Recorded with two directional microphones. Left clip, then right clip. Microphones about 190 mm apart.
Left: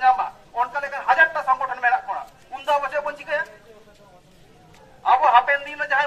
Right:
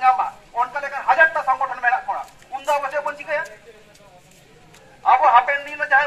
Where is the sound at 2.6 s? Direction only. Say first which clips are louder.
Even; 10° left (ahead or behind).